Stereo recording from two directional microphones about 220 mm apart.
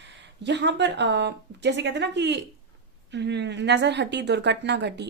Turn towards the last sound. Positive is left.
turn(degrees=-50)  # may be behind; listen again after turning